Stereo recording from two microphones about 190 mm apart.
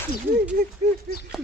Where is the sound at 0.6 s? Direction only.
50° right (ahead or behind).